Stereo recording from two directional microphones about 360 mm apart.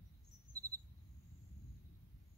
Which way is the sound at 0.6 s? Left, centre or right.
Right.